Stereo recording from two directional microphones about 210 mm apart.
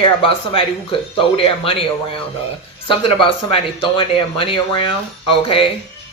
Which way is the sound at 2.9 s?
25° left (ahead or behind).